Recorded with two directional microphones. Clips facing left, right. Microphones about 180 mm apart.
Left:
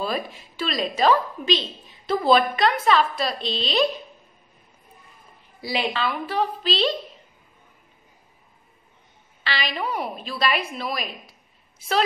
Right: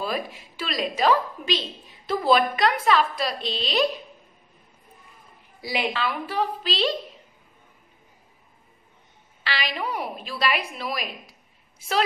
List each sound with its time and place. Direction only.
0.0 s a woman's voice: 10° right (ahead or behind)
5.6 s a woman's voice: 15° right (ahead or behind)
9.4 s a woman's voice: 10° right (ahead or behind)